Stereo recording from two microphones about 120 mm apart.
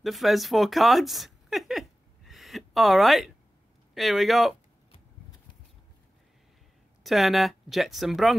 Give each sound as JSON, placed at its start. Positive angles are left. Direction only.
{"t": 0.0, "sound": "a sound", "side_deg": 0}
{"t": 3.9, "sound": "speech", "side_deg": 0}
{"t": 7.0, "sound": "speech", "side_deg": 0}